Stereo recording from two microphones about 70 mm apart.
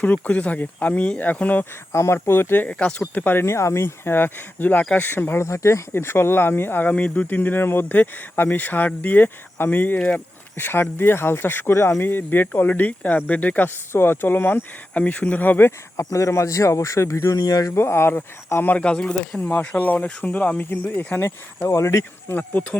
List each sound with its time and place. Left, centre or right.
0.0 s speech: left
1.9 s speech: left; by 2.9 s centre
3.2 s speech: left
11.7 s speech: left
12.0 s speech: left
13.9 s speech: left
16.0 s speech: left
17.7 s speech: left
18.7 s speech: centre
19.5 s speech: left
21.7 s speech: left
22.4 s speech: left